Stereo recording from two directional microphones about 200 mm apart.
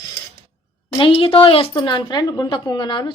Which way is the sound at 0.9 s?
25° left (ahead or behind).